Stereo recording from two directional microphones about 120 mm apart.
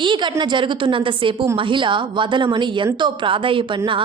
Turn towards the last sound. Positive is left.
turn(degrees=-45)  # may be behind; listen again after turning